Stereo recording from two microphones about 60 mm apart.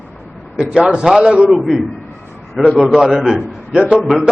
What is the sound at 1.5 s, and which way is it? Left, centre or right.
A man's voice, centre.